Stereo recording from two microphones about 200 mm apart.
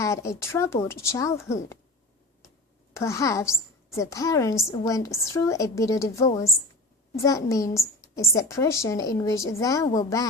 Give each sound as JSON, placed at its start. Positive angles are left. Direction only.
{"t": 0.0, "sound": "a woman's voice", "side_deg": 15}
{"t": 2.9, "sound": "a woman's voice", "side_deg": 15}